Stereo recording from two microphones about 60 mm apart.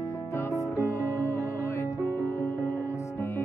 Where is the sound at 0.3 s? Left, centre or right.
Left.